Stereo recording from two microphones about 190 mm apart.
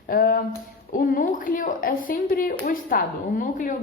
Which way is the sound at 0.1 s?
50° left (ahead or behind).